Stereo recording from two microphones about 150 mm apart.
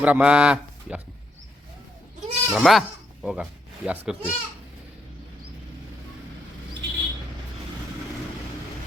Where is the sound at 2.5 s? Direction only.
Centre (ahead or behind).